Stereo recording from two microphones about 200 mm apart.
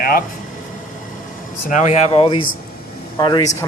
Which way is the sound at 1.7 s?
35° left (ahead or behind).